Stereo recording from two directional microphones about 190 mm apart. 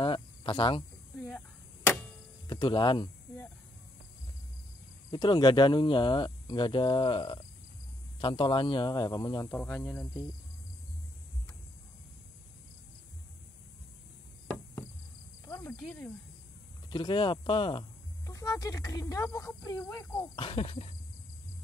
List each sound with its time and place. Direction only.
0.0 s cricket: 25° left (ahead or behind)
1.1 s a sound: 5° left (ahead or behind)
2.4 s a sound: 20° left (ahead or behind)
5.1 s speech: 25° left (ahead or behind)
9.5 s speech: 5° left (ahead or behind)
15.4 s cricket: 15° left (ahead or behind)
15.8 s speech: 10° left (ahead or behind)
16.9 s speech: 25° left (ahead or behind)